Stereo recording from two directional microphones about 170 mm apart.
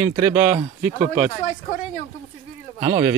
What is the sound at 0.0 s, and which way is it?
Speech, 20° right (ahead or behind).